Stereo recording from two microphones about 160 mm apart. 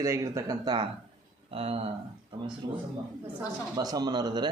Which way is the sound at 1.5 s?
40° right (ahead or behind).